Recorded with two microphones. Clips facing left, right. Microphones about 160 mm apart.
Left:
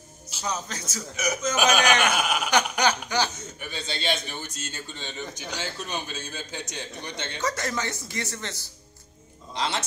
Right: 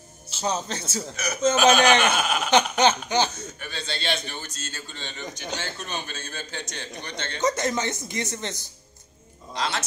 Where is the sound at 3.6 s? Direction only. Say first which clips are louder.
Left 1 dB; 10° left (ahead or behind).